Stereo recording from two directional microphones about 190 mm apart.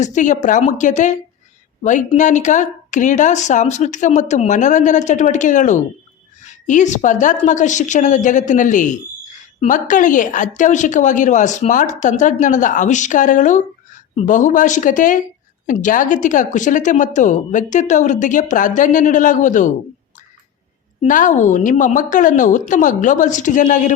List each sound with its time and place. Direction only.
0.0 s a woman's voice: 40° left (ahead or behind)
21.0 s a woman's voice: 45° left (ahead or behind)